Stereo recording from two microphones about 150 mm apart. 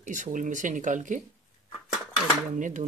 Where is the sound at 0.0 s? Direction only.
55° right (ahead or behind).